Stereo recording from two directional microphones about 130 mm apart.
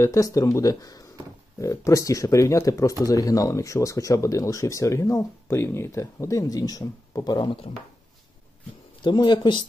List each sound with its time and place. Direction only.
0.0 s speech: 25° left (ahead or behind)
9.0 s speech: 35° left (ahead or behind)